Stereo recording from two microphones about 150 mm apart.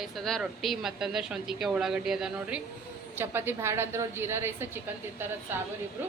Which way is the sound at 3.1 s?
15° right (ahead or behind).